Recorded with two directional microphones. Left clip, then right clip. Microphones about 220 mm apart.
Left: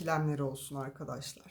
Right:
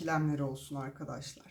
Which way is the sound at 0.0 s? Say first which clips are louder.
Even; 45° left (ahead or behind).